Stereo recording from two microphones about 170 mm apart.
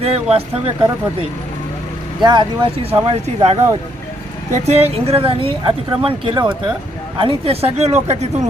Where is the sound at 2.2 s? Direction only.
25° right (ahead or behind).